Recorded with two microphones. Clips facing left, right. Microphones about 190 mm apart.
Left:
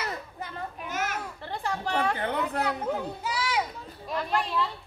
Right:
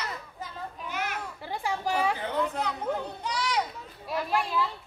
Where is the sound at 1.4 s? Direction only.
10° right (ahead or behind).